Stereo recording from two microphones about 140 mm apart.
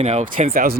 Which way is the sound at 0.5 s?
90° right.